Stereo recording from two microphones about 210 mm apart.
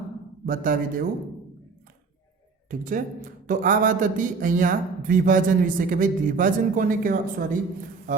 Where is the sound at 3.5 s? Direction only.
40° right (ahead or behind).